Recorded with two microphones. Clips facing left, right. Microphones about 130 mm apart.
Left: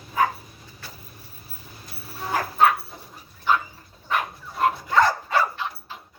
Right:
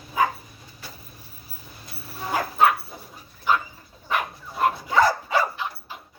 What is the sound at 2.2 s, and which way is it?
Dog, 5° right (ahead or behind).